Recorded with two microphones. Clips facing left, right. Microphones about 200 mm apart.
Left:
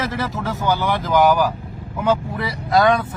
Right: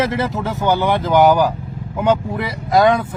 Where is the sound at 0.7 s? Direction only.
25° right (ahead or behind).